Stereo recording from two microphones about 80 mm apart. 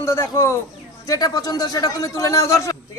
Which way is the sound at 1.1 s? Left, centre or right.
Left.